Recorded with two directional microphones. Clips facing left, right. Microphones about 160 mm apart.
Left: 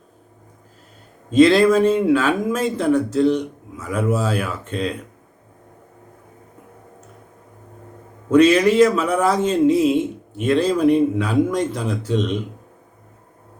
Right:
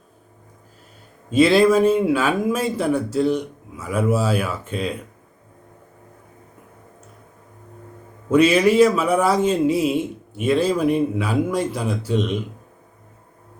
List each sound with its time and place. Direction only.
1.3 s speech: 10° right (ahead or behind)
8.3 s speech: 10° right (ahead or behind)